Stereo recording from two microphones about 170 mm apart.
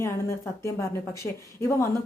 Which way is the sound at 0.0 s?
15° left (ahead or behind).